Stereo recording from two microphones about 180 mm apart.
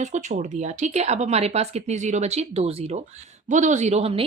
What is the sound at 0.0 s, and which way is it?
A woman's voice, 40° right (ahead or behind).